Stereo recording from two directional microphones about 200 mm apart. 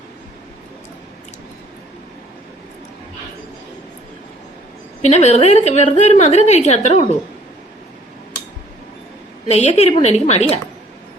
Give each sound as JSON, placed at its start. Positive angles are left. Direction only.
{"t": 5.0, "sound": "a woman's voice", "side_deg": 35}
{"t": 9.5, "sound": "a woman's voice", "side_deg": 35}